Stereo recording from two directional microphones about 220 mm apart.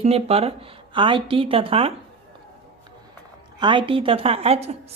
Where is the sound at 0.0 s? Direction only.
25° right (ahead or behind).